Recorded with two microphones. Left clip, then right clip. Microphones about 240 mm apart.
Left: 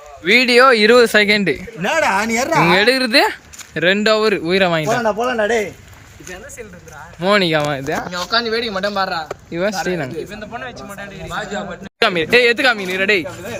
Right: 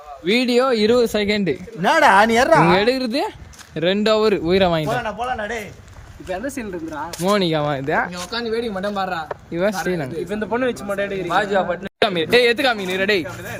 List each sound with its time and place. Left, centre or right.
0.3 s speech: centre
1.8 s speech: centre
4.9 s speech: left
7.2 s speech: centre
8.1 s speech: centre
10.2 s a man's voice: right
12.0 s speech: centre